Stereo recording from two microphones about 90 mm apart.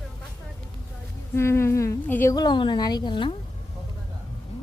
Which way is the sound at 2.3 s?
50° left (ahead or behind).